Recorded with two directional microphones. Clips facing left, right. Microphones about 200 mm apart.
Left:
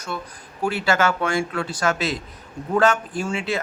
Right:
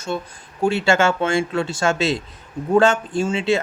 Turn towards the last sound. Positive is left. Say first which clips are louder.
# right 6 dB
turn(degrees=-25)  # may be behind; listen again after turning